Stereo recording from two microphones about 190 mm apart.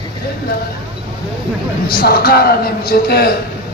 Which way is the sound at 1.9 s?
55° left (ahead or behind).